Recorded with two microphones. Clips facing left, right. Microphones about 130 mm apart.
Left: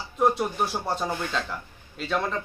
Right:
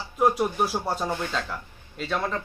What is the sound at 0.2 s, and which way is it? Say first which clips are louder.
Speech: right 1 dB; 5° right (ahead or behind).